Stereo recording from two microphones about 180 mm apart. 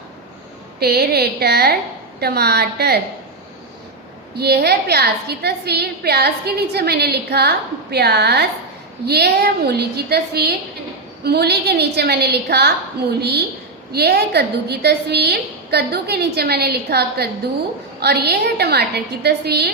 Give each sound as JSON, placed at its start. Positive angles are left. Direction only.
{"t": 0.8, "sound": "a woman's voice", "side_deg": -60}
{"t": 4.4, "sound": "a woman's voice", "side_deg": -65}
{"t": 13.9, "sound": "a woman's voice", "side_deg": -65}